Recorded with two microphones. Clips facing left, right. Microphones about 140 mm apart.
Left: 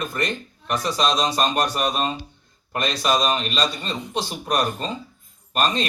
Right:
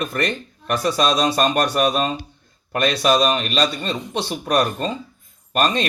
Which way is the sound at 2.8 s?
60° right (ahead or behind).